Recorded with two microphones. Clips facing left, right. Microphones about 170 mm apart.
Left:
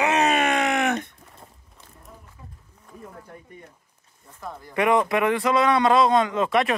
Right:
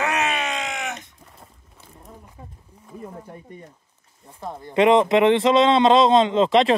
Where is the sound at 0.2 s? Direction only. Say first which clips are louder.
Left 5 dB; 50° left (ahead or behind).